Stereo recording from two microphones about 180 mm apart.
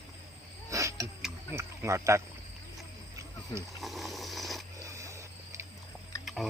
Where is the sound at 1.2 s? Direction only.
15° right (ahead or behind).